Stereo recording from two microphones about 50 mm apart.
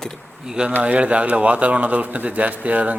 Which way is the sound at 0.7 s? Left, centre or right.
Right.